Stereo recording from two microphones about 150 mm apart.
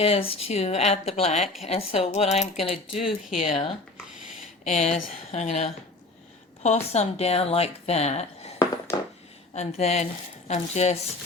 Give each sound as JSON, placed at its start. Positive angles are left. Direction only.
{"t": 0.0, "sound": "speech", "side_deg": 40}
{"t": 3.9, "sound": "a sound", "side_deg": -5}
{"t": 4.6, "sound": "speech", "side_deg": 50}
{"t": 9.6, "sound": "speech", "side_deg": 45}